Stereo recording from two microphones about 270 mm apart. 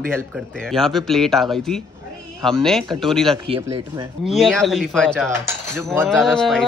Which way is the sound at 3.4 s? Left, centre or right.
Centre.